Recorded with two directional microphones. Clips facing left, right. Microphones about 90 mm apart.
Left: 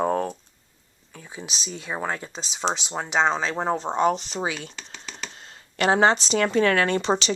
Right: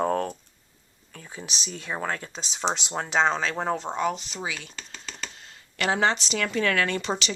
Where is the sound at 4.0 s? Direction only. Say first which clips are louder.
Left 6 dB; 40° left (ahead or behind).